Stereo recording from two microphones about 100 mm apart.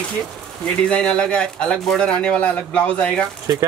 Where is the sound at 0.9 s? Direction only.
10° left (ahead or behind).